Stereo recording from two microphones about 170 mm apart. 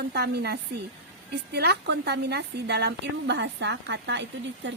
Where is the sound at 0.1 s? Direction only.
70° right (ahead or behind).